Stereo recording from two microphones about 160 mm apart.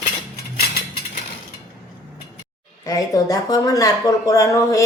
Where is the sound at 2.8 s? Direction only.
20° left (ahead or behind).